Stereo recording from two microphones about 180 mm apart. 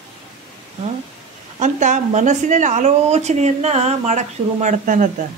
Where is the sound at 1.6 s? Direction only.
40° right (ahead or behind).